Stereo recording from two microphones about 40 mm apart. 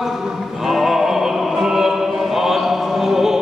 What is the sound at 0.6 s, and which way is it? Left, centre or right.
Music, centre.